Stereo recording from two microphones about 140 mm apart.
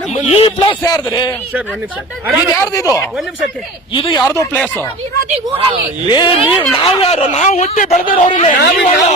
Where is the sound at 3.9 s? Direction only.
40° left (ahead or behind).